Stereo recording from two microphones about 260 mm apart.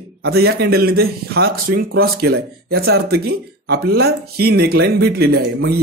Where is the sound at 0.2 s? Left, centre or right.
Right.